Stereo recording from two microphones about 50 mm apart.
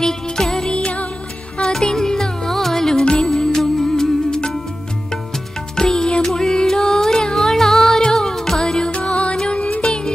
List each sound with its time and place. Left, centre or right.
0.0 s music: centre
9.8 s music: centre